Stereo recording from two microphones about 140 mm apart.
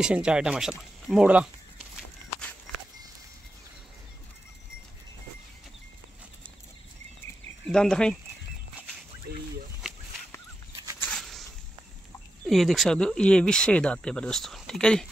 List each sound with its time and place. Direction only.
0.0 s speech: 5° right (ahead or behind)
7.6 s speech: 5° left (ahead or behind)
11.1 s a sound: centre (ahead or behind)
12.4 s speech: centre (ahead or behind)